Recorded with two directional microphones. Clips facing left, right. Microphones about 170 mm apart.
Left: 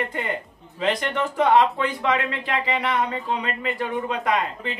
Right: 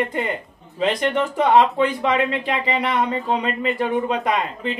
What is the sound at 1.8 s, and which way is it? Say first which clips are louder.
Speech: right 4 dB; 20° right (ahead or behind).